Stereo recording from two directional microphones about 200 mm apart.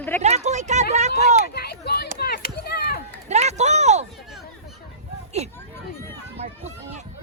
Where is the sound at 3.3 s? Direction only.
35° right (ahead or behind).